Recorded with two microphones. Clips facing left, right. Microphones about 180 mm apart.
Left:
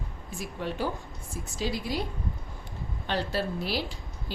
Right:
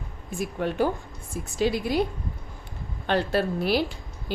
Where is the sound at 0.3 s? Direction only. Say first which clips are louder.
Right 6 dB; 55° right (ahead or behind).